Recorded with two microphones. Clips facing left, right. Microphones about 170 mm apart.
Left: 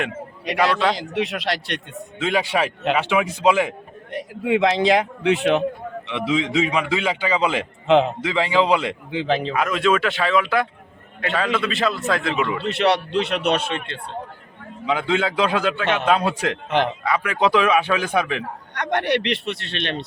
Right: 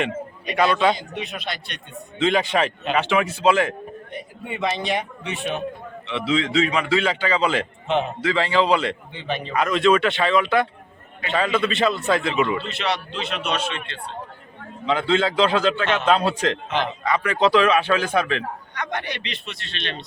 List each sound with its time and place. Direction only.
0.9 s a man's voice: 90° left
2.1 s a man's voice: 5° left (ahead or behind)
4.1 s a man's voice: 90° left
6.1 s a man's voice: 15° left (ahead or behind)
9.1 s a man's voice: 90° left
9.5 s speech: 5° left (ahead or behind)
12.5 s a man's voice: 65° left (ahead or behind)
14.8 s a man's voice: 10° left (ahead or behind)
16.6 s a man's voice: 60° left (ahead or behind)
17.0 s a man's voice: 5° left (ahead or behind)
18.7 s a man's voice: 70° left (ahead or behind)